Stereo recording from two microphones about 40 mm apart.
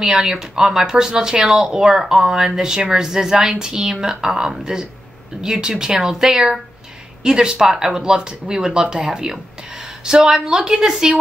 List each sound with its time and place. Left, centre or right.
0.0 s speech: centre